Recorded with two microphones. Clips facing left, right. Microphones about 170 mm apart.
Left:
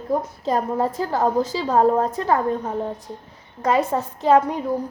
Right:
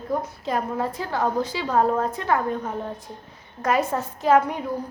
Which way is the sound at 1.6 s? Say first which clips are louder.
Left 4 dB; 20° left (ahead or behind).